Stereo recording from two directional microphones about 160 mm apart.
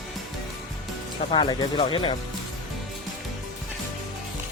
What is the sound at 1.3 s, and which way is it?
Speech, 30° left (ahead or behind).